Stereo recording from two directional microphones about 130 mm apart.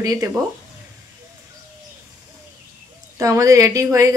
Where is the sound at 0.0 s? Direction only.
25° right (ahead or behind).